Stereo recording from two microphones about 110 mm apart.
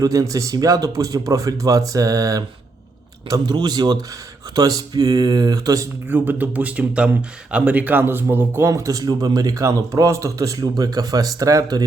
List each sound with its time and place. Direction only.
0.0 s speech: 30° right (ahead or behind)
6.1 s speech: 15° right (ahead or behind)